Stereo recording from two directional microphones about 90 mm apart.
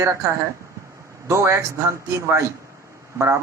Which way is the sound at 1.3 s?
30° right (ahead or behind).